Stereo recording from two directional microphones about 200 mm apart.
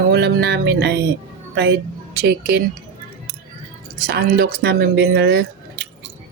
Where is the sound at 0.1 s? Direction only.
55° right (ahead or behind).